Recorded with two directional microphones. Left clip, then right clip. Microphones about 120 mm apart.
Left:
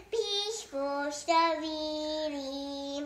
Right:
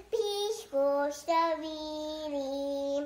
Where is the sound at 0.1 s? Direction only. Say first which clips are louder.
Right 1 dB; 50° right (ahead or behind).